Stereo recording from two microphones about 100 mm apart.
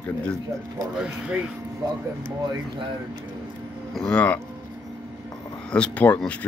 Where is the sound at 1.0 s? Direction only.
10° right (ahead or behind).